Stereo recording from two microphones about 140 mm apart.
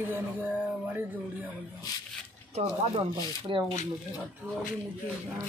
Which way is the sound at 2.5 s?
50° right (ahead or behind).